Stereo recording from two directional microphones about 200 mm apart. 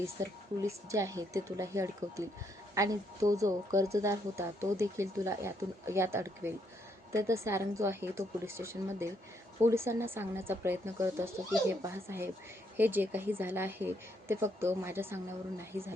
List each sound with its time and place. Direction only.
0.2 s a woman's voice: 15° right (ahead or behind)